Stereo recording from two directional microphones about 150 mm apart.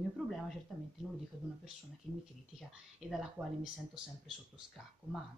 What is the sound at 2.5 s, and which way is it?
Speech, centre (ahead or behind).